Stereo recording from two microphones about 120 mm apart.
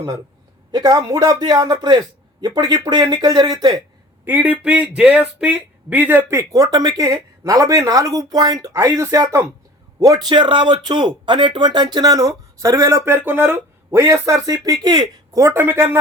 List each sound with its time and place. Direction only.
0.7 s speech: 35° right (ahead or behind)
4.3 s speech: 15° right (ahead or behind)
6.5 s speech: 30° right (ahead or behind)
10.2 s speech: 40° right (ahead or behind); by 16.0 s 20° right (ahead or behind)